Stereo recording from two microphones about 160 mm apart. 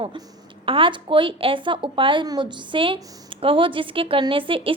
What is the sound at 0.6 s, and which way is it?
A woman's voice, 35° right (ahead or behind).